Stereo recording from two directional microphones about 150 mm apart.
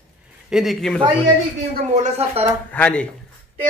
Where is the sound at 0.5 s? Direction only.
Centre (ahead or behind).